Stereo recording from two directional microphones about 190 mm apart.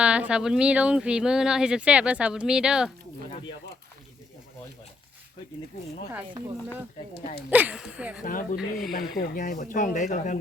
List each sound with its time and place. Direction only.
0.0 s speech: 5° right (ahead or behind)
7.5 s speech: 5° right (ahead or behind)
8.2 s speech: 45° left (ahead or behind)